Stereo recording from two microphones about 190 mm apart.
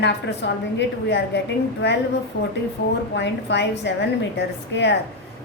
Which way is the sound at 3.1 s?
65° left (ahead or behind).